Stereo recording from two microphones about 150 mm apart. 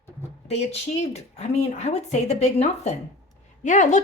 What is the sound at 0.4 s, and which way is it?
Speech, 45° left (ahead or behind).